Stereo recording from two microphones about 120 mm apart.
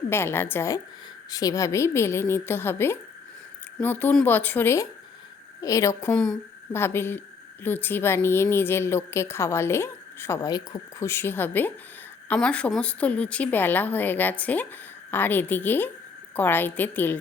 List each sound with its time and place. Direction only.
0.1 s a woman's voice: 20° left (ahead or behind)
1.3 s a woman's voice: 30° left (ahead or behind)